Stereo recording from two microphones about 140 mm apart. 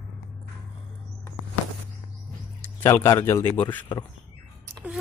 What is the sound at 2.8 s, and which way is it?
Speech, 20° left (ahead or behind).